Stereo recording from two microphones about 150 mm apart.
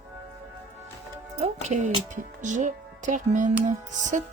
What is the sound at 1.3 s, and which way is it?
A woman's voice, 50° right (ahead or behind).